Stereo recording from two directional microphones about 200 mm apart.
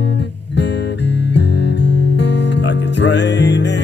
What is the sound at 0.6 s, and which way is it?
Music, 60° left (ahead or behind).